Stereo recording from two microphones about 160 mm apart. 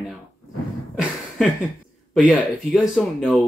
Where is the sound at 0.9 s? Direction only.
Centre (ahead or behind).